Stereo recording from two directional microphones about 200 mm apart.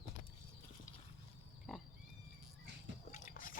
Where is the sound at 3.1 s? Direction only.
40° left (ahead or behind).